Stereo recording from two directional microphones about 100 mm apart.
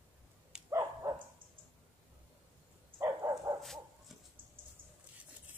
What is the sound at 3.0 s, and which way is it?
Dog, 35° right (ahead or behind).